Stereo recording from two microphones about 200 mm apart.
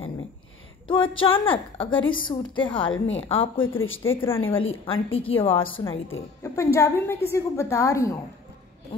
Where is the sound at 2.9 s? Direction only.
70° left (ahead or behind).